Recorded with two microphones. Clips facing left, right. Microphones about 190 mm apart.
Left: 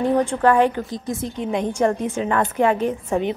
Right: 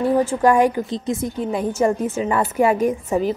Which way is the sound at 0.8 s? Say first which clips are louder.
Right 3 dB; 20° right (ahead or behind).